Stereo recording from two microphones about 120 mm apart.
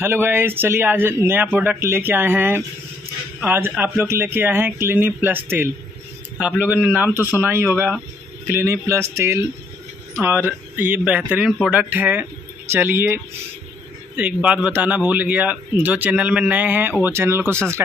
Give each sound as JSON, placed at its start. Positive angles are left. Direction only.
{"t": 0.0, "sound": "a man's voice", "side_deg": -20}
{"t": 11.9, "sound": "a man's voice", "side_deg": -15}